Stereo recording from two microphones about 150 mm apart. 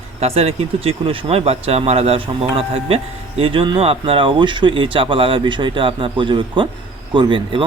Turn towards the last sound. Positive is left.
turn(degrees=-35)  # may be behind; listen again after turning